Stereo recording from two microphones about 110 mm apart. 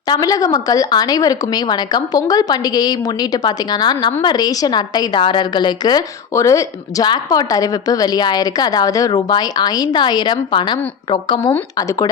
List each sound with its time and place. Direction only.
0.1 s a woman's voice: 35° left (ahead or behind)
6.3 s a woman's voice: 30° left (ahead or behind); by 11.5 s 45° left (ahead or behind)
11.8 s a woman's voice: 30° left (ahead or behind)